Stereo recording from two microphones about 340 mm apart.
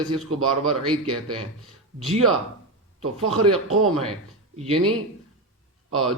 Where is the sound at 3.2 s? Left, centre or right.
Right.